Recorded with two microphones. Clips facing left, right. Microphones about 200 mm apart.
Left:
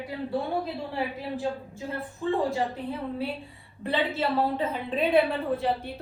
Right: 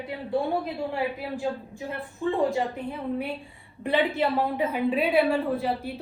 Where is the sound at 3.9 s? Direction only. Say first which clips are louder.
Right 3 dB; 15° right (ahead or behind).